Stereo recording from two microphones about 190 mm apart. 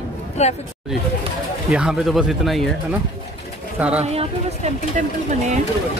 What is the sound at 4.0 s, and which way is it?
Speech, 35° right (ahead or behind).